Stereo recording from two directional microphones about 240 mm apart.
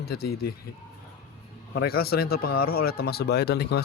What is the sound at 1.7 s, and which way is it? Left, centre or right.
A man's voice, left.